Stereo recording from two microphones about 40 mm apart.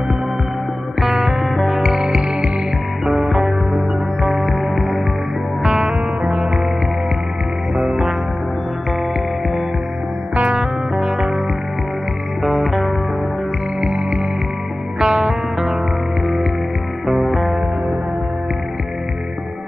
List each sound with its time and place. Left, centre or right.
1.0 s music: centre
2.0 s music: right
3.1 s music: centre
5.6 s music: centre
10.3 s music: right
11.0 s music: centre
12.4 s music: centre
13.7 s music: centre
17.1 s music: centre